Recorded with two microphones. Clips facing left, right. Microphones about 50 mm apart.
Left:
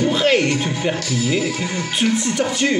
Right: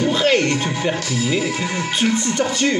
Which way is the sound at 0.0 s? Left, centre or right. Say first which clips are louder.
Even; centre.